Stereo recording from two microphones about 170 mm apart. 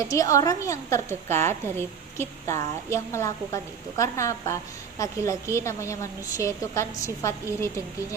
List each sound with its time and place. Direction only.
0.0 s a woman's voice: 20° left (ahead or behind)